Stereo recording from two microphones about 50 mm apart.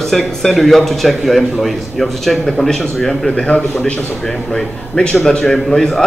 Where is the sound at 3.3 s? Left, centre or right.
Left.